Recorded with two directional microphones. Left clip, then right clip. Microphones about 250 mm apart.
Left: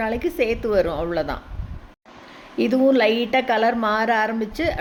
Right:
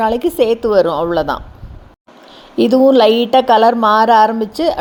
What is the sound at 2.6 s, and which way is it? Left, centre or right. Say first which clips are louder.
A woman's voice: right 8 dB; right.